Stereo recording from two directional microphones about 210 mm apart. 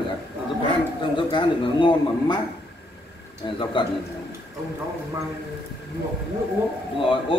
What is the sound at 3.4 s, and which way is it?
Speech, 25° left (ahead or behind).